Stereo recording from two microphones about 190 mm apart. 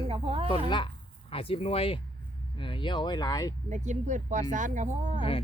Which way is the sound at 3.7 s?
40° right (ahead or behind).